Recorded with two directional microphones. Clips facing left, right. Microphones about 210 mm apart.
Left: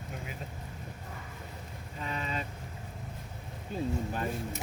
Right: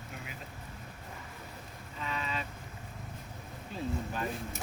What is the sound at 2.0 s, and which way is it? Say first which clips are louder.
Vehicle: left 1 dB; 40° left (ahead or behind).